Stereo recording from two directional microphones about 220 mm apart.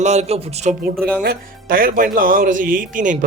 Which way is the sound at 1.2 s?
45° right (ahead or behind).